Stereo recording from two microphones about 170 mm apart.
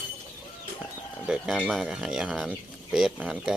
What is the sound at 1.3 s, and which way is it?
Speech, centre (ahead or behind).